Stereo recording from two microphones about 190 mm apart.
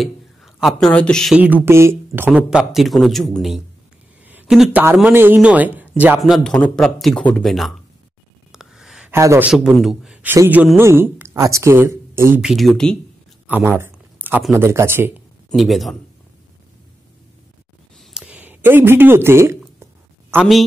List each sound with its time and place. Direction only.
0.0 s a man's voice: centre (ahead or behind)
8.5 s a sound: centre (ahead or behind)
9.1 s a man's voice: 15° right (ahead or behind)
9.5 s a man's voice: centre (ahead or behind)
12.4 s speech: centre (ahead or behind)
13.5 s speech: 10° right (ahead or behind)
15.5 s speech: centre (ahead or behind)
17.9 s a sound: 5° right (ahead or behind)